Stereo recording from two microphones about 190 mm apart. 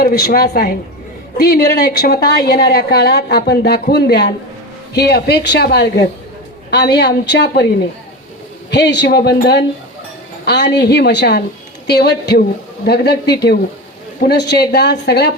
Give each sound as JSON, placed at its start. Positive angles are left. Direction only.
{"t": 0.0, "sound": "a woman's voice", "side_deg": 55}